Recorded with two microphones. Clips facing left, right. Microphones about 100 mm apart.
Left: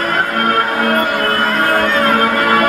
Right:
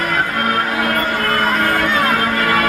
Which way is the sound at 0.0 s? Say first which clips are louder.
Left 2 dB; 40° left (ahead or behind).